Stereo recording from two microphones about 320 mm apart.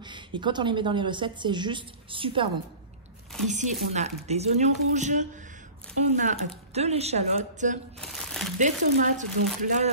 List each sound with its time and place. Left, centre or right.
0.0 s a woman's voice: centre
8.0 s crumpling: centre
8.5 s speech: right